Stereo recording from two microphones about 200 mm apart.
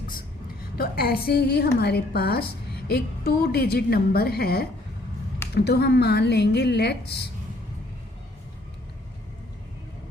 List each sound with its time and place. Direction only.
0.8 s a woman's voice: 50° left (ahead or behind)